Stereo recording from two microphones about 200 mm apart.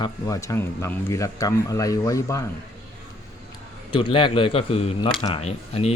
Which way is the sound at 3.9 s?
25° left (ahead or behind).